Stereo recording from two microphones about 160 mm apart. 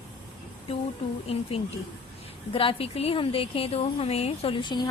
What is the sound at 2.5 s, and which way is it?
A woman's voice, 35° left (ahead or behind).